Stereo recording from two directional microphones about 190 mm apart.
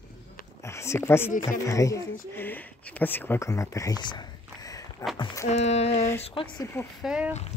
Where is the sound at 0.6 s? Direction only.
15° left (ahead or behind).